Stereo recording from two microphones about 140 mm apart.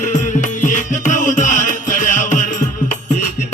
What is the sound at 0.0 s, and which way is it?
Music, 60° left (ahead or behind).